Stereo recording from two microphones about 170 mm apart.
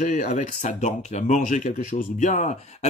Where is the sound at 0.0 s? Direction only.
45° left (ahead or behind).